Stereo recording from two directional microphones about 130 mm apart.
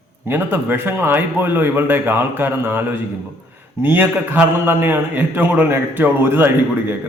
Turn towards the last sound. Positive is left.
turn(degrees=-15)  # may be behind; listen again after turning